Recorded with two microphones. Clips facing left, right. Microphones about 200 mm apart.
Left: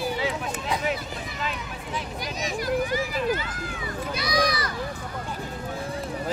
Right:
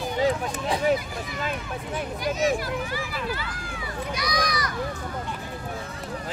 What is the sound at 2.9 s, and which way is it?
Speech, 20° left (ahead or behind).